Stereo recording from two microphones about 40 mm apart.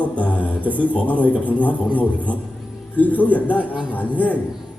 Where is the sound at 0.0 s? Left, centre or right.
Left.